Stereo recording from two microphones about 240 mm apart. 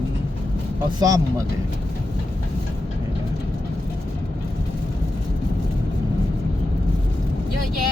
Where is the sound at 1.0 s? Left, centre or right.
Centre.